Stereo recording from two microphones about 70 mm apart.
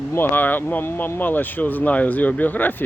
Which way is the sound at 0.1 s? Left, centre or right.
Left.